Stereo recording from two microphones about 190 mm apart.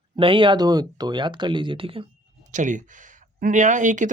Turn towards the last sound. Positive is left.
turn(degrees=-40)  # may be behind; listen again after turning